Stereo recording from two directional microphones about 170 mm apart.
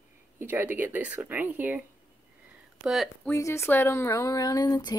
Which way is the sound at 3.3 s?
15° left (ahead or behind).